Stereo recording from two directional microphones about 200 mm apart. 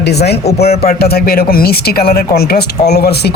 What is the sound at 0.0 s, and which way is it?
Speech, 55° left (ahead or behind).